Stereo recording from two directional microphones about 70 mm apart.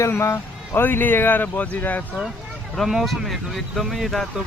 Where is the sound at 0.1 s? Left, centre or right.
Left.